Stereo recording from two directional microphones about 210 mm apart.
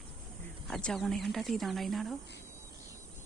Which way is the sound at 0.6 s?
Centre (ahead or behind).